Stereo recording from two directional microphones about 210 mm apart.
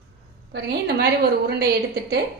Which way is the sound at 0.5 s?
50° right (ahead or behind).